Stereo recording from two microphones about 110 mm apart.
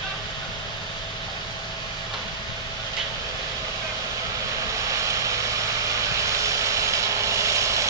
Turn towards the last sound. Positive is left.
turn(degrees=-30)  # may be behind; listen again after turning